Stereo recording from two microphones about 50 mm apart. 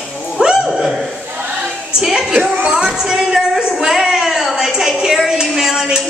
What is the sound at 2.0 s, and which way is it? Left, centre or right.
Speech, centre.